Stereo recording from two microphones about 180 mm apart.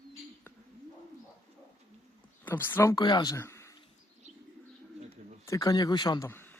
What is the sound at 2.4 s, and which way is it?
Speech, 10° left (ahead or behind).